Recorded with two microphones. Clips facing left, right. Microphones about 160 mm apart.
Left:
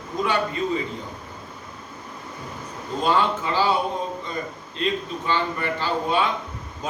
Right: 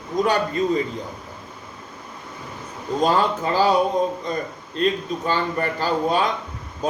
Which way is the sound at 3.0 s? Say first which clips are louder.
Right 2 dB; 40° right (ahead or behind).